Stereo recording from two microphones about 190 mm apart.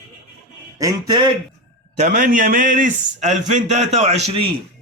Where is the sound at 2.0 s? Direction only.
45° right (ahead or behind).